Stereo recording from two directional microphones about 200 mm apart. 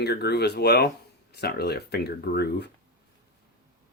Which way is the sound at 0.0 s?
55° left (ahead or behind).